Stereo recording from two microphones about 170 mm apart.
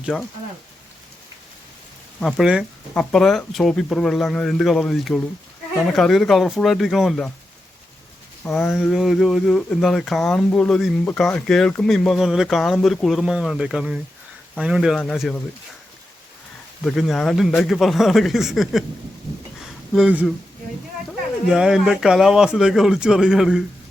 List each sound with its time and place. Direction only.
0.0 s speech: centre (ahead or behind)
2.2 s speech: 5° right (ahead or behind)
8.7 s speech: centre (ahead or behind)
16.8 s speech: centre (ahead or behind)
19.5 s a sound: centre (ahead or behind)
21.1 s speech: 5° right (ahead or behind)